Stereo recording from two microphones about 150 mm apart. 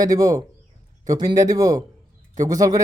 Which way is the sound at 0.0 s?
25° right (ahead or behind).